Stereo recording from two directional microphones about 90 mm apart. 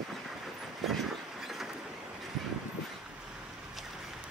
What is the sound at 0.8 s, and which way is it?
Vehicle, centre (ahead or behind).